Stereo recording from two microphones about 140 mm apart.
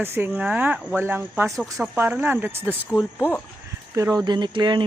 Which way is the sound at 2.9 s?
20° left (ahead or behind).